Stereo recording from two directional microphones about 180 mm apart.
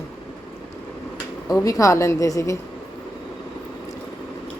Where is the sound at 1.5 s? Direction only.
20° left (ahead or behind).